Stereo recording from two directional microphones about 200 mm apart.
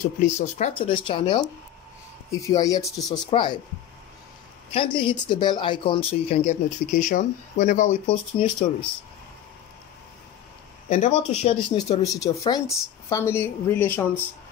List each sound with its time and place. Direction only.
0.2 s speech: 35° left (ahead or behind)
4.7 s speech: 25° left (ahead or behind)
10.9 s speech: 35° left (ahead or behind)
11.7 s speech: 20° left (ahead or behind)